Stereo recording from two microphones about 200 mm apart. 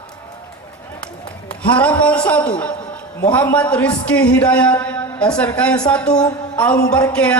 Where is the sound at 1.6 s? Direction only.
5° left (ahead or behind).